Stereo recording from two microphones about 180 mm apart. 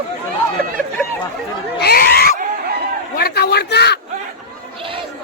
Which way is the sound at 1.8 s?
60° left (ahead or behind).